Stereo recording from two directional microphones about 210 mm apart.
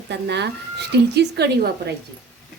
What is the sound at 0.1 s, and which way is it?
Speech, 55° right (ahead or behind).